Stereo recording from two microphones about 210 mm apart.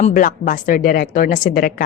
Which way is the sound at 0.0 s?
40° left (ahead or behind).